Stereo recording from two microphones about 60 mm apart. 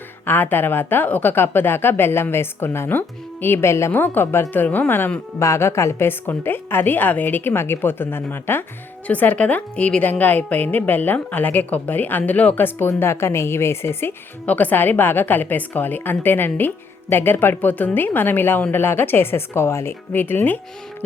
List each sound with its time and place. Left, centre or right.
0.3 s a woman's voice: left
3.9 s a woman's voice: left
5.4 s a woman's voice: left
6.1 s a woman's voice: left
9.0 s a woman's voice: left
13.0 s a woman's voice: left
14.4 s a woman's voice: left